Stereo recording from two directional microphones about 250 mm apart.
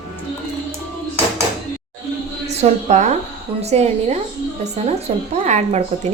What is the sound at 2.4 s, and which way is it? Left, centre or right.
A woman's voice, right.